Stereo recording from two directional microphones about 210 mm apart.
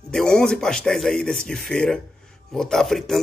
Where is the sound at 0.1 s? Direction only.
5° left (ahead or behind).